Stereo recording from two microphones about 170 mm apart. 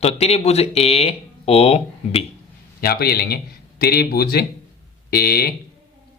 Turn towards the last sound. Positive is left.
turn(degrees=65)  # may be behind; listen again after turning